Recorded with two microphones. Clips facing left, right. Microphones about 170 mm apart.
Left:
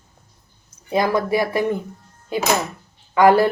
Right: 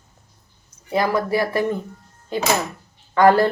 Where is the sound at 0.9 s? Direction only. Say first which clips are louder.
Left 1 dB; 20° left (ahead or behind).